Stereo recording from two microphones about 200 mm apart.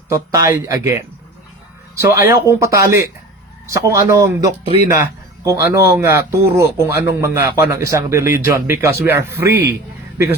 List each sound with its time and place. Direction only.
0.1 s a man's voice: 15° right (ahead or behind)
2.1 s a man's voice: 15° right (ahead or behind)